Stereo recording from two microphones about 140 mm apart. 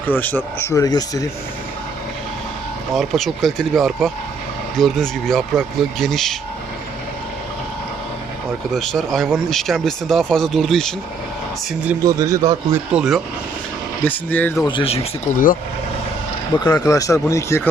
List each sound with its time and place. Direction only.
0.0 s speech: 10° left (ahead or behind)
2.9 s speech: centre (ahead or behind)
8.7 s speech: centre (ahead or behind)
12.0 s a man's voice: 25° right (ahead or behind)
12.9 s speech: 5° right (ahead or behind)
14.0 s speech: 10° left (ahead or behind)
14.7 s speech: 40° left (ahead or behind)
16.6 s speech: 25° left (ahead or behind)